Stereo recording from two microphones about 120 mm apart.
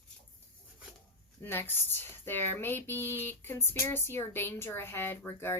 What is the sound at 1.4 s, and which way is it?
A woman's voice, 20° left (ahead or behind).